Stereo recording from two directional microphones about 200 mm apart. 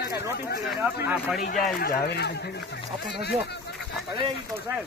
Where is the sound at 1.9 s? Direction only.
55° left (ahead or behind).